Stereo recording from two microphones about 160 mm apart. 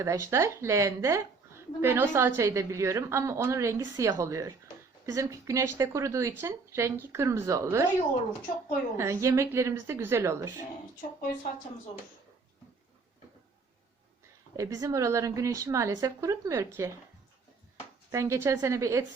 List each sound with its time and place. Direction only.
0.0 s a woman's voice: 20° right (ahead or behind)
9.0 s a woman's voice: 20° right (ahead or behind)
14.5 s a woman's voice: 20° right (ahead or behind)
18.1 s a woman's voice: 20° right (ahead or behind)